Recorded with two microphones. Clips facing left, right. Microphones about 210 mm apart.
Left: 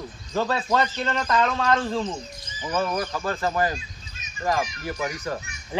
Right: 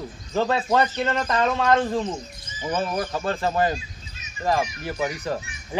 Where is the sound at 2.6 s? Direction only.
25° right (ahead or behind).